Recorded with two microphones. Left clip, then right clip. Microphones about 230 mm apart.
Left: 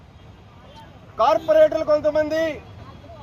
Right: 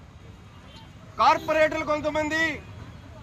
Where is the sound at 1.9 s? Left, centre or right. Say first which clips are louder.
Left 7 dB; centre.